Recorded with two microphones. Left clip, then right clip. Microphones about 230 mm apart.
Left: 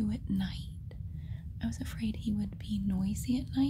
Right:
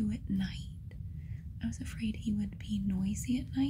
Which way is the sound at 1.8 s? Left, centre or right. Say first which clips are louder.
Right 1 dB; centre.